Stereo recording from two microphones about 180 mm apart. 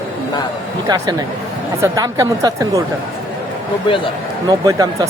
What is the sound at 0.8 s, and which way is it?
Speech, 20° right (ahead or behind).